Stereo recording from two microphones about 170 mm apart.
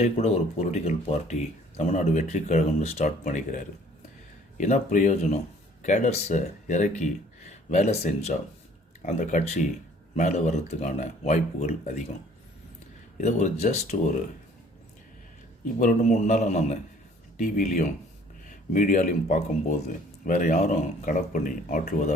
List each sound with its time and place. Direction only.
0.0 s speech: 40° left (ahead or behind)
13.2 s speech: 45° left (ahead or behind)
15.8 s speech: 50° left (ahead or behind)